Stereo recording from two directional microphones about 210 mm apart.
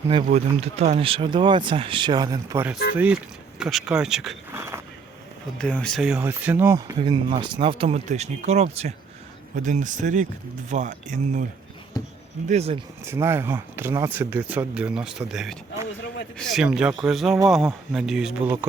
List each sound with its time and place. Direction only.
0.3 s speech: 30° right (ahead or behind); by 4.8 s 10° right (ahead or behind)
5.5 s speech: 5° left (ahead or behind); by 11.4 s 35° right (ahead or behind)
11.9 s speech: 15° left (ahead or behind)
12.5 s speech: 30° right (ahead or behind)
13.1 s speech: 10° right (ahead or behind)